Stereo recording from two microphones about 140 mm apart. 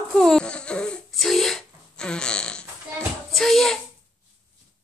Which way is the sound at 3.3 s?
Centre (ahead or behind).